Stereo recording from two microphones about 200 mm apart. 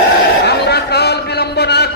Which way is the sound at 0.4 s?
55° left (ahead or behind).